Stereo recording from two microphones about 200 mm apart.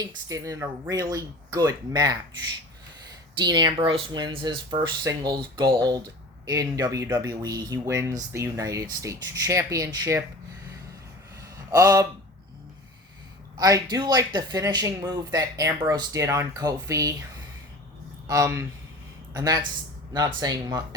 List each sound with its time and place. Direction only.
0.0 s speech: 20° right (ahead or behind)
3.3 s speech: 20° right (ahead or behind)
11.7 s speech: 15° right (ahead or behind)
13.6 s speech: 20° right (ahead or behind)
18.3 s speech: 15° right (ahead or behind)